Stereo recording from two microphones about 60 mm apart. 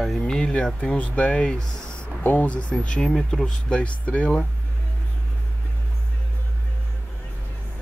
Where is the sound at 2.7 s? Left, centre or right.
Centre.